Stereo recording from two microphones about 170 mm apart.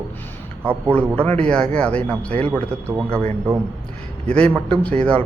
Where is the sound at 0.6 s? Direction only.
10° right (ahead or behind).